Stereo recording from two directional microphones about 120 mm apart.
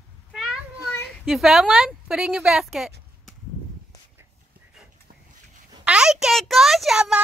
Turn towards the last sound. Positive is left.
turn(degrees=-5)  # may be behind; listen again after turning